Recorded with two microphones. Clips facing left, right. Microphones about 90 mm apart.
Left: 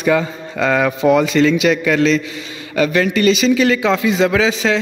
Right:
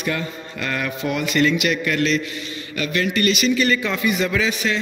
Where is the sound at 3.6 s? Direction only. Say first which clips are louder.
Left 6 dB; 90° left.